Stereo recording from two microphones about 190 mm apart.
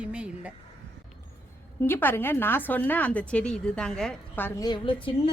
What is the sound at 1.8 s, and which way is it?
A woman's voice, 10° left (ahead or behind).